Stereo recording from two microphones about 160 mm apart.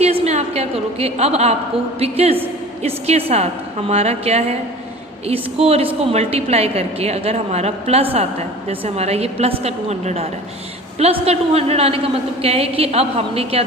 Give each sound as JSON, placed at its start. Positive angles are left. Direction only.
{"t": 0.0, "sound": "a woman's voice", "side_deg": -40}